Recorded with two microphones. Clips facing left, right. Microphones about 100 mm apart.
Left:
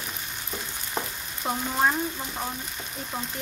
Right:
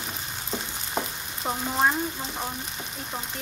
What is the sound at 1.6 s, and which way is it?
Speech, 10° right (ahead or behind).